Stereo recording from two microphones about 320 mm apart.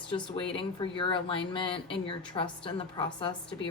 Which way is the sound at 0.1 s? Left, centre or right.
Centre.